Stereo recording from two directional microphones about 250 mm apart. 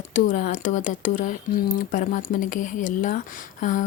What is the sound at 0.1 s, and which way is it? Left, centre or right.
Speech, left.